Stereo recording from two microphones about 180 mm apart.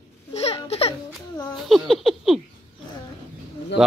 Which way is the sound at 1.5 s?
Centre (ahead or behind).